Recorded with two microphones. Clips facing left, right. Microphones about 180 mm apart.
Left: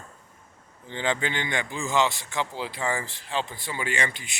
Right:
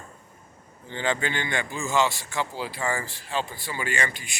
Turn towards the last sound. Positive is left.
turn(degrees=20)  # may be behind; listen again after turning